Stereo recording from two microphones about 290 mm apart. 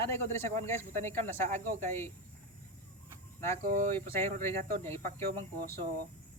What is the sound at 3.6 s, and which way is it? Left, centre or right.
Speech, right.